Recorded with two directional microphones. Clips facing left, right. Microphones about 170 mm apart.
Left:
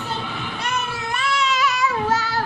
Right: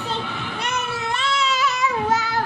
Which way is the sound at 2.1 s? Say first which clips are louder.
Even; 15° right (ahead or behind).